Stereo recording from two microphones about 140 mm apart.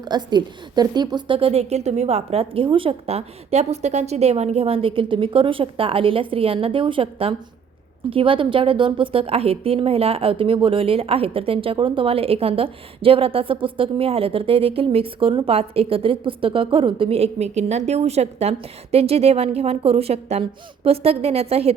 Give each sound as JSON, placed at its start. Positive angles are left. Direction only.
{"t": 0.0, "sound": "a woman's voice", "side_deg": -30}